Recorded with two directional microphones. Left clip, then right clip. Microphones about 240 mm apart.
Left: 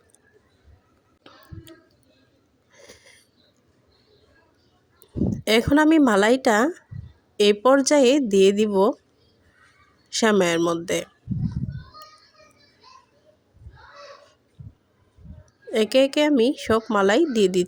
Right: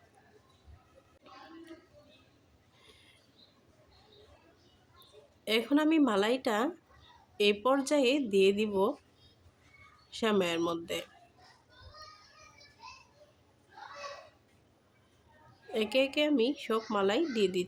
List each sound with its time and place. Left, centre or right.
2.8 s a sound: left
5.5 s speech: left
10.1 s speech: left
15.7 s speech: left